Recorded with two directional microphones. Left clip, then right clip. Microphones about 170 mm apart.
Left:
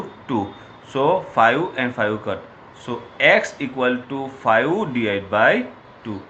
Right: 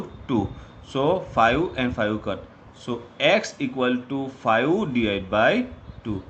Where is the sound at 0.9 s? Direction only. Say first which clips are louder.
Left 4 dB; 65° right (ahead or behind).